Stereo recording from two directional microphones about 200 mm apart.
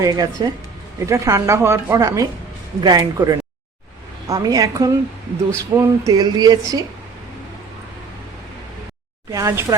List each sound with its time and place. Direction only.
0.0 s a woman's voice: 20° right (ahead or behind)
9.3 s speech: 15° right (ahead or behind)